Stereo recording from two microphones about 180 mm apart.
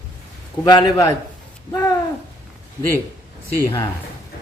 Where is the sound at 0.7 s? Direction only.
20° left (ahead or behind).